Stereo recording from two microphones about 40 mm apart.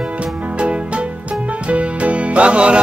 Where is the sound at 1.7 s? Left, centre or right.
Right.